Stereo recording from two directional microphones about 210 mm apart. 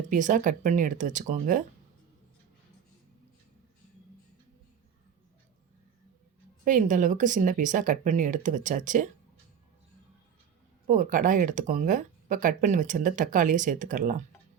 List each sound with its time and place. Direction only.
0.1 s speech: 35° right (ahead or behind)
6.7 s speech: 35° right (ahead or behind)
10.8 s speech: 40° right (ahead or behind)